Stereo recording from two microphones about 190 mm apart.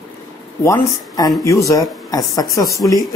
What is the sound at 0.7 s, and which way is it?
Speech, 20° left (ahead or behind).